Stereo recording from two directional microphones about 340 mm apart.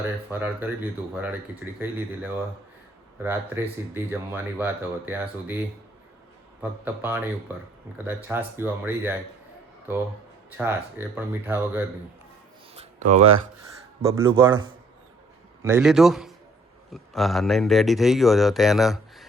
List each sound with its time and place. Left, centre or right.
0.3 s speech: centre
1.8 s speech: centre
6.6 s speech: centre
10.6 s speech: centre
12.7 s a sound: centre
14.0 s speech: centre